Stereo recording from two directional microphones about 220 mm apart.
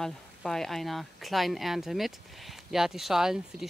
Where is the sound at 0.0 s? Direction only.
Centre (ahead or behind).